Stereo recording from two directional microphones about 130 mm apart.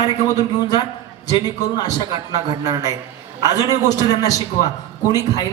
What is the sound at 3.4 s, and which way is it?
A man's voice, 30° left (ahead or behind).